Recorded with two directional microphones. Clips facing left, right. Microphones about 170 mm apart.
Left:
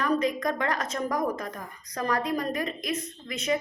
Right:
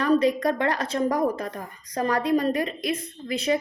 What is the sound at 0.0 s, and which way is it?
A woman's voice, 35° right (ahead or behind).